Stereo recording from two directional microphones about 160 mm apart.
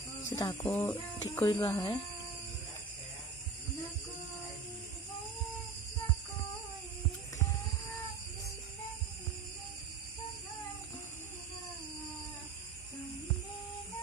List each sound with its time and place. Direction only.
0.3 s speech: 20° left (ahead or behind)
1.5 s speech: 30° left (ahead or behind)